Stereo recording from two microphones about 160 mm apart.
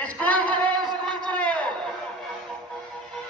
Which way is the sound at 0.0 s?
10° left (ahead or behind).